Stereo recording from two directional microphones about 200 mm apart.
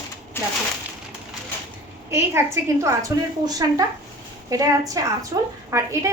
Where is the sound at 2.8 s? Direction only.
15° right (ahead or behind).